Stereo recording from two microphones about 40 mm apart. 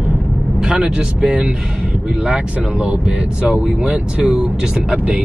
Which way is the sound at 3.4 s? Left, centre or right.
Right.